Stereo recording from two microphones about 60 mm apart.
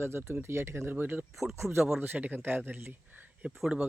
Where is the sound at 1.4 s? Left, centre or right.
Right.